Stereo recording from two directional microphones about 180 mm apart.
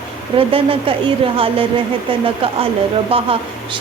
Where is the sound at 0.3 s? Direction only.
30° right (ahead or behind).